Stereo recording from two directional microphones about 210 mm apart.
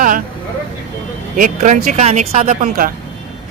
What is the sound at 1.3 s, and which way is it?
Speech, 40° right (ahead or behind).